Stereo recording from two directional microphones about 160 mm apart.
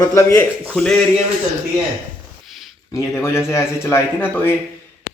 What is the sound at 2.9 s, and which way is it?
Speech, 15° left (ahead or behind).